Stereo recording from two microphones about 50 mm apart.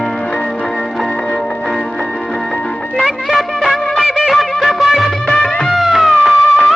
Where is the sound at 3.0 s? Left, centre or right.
Centre.